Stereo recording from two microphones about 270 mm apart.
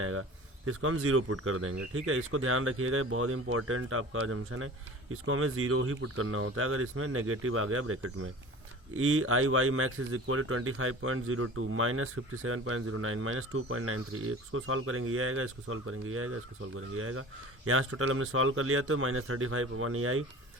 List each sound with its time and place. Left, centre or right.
0.0 s speech: right